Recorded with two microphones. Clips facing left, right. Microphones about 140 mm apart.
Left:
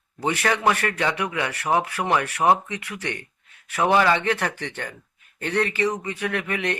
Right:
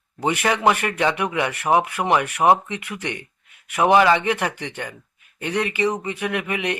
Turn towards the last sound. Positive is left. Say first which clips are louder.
# right 2 dB
turn(degrees=-15)  # may be behind; listen again after turning